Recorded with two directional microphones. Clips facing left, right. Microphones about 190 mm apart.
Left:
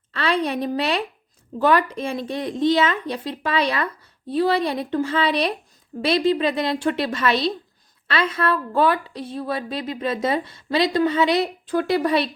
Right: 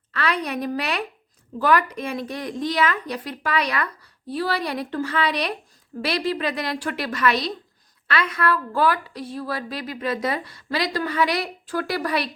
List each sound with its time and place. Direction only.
0.1 s a woman's voice: 25° left (ahead or behind)